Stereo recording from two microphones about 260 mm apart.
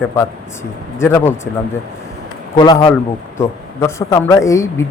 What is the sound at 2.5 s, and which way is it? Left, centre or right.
A man's voice, centre.